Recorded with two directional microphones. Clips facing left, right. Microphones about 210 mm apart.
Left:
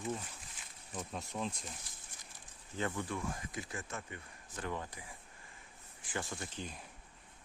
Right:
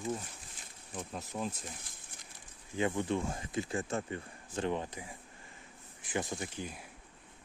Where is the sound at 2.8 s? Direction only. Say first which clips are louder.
Right 6 dB; 20° right (ahead or behind).